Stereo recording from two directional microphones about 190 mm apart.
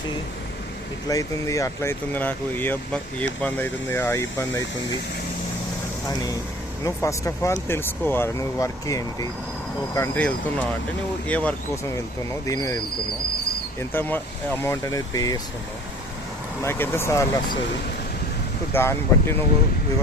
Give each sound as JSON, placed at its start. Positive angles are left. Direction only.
{"t": 1.0, "sound": "speech", "side_deg": 15}
{"t": 6.8, "sound": "speech", "side_deg": 15}
{"t": 13.9, "sound": "speech", "side_deg": 10}
{"t": 16.6, "sound": "speech", "side_deg": 10}
{"t": 18.7, "sound": "speech", "side_deg": 10}